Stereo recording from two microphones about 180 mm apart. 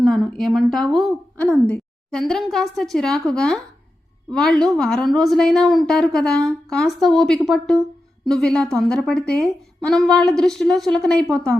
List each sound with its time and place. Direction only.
0.0 s a woman's voice: centre (ahead or behind)